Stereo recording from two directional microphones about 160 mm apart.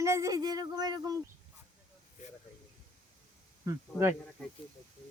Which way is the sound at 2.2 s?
50° left (ahead or behind).